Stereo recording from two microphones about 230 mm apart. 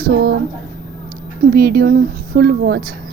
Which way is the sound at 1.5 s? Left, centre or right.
Right.